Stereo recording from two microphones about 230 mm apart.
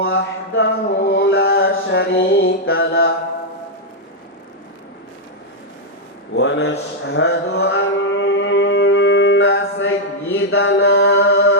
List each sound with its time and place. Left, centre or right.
0.0 s mantra: left
6.3 s mantra: left
10.8 s mantra: left
11.2 s music: left